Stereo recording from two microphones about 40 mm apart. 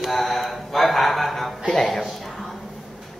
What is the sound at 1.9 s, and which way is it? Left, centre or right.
Music, centre.